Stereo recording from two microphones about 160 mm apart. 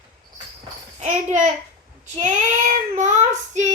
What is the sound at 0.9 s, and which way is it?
Speech, 50° right (ahead or behind).